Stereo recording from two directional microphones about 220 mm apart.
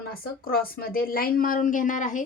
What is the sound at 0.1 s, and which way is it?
A woman's voice, 40° left (ahead or behind).